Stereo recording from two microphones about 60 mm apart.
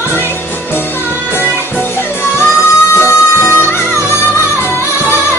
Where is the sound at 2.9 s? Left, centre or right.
Left.